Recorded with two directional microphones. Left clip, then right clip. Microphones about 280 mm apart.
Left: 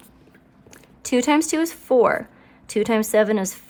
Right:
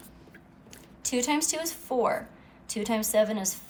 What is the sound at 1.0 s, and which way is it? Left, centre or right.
A woman's voice, left.